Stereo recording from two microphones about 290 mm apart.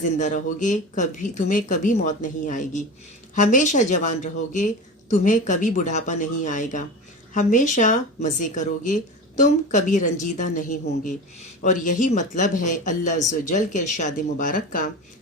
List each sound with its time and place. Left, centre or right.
0.0 s speech: left